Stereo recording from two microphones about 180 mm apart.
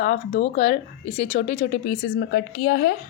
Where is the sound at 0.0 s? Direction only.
45° left (ahead or behind); by 2.9 s 70° left (ahead or behind).